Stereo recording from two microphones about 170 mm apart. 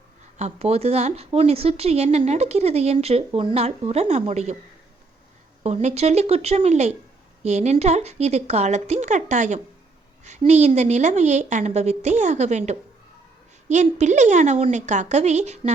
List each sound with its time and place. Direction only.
0.3 s a woman's voice: 40° right (ahead or behind)
5.6 s a woman's voice: 40° right (ahead or behind)